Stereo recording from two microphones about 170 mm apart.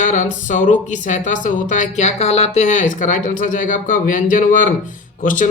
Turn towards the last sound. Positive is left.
turn(degrees=50)  # may be behind; listen again after turning